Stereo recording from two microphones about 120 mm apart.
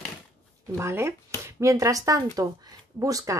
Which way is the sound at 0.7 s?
20° right (ahead or behind).